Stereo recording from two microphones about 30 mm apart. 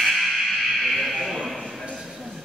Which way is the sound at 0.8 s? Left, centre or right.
Centre.